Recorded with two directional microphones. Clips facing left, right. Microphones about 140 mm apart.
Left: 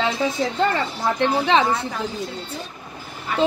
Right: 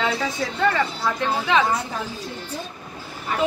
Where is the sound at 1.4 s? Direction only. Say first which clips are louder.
Even; 30° left (ahead or behind).